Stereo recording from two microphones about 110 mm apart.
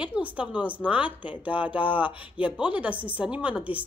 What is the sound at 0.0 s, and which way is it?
Speech, 10° right (ahead or behind).